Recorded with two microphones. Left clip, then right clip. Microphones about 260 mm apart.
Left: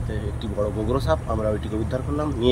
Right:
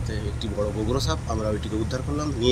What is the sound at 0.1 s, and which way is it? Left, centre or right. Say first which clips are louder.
Speech: left 1 dB; centre.